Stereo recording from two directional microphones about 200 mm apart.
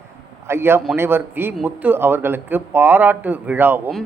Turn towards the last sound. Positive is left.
turn(degrees=-10)  # may be behind; listen again after turning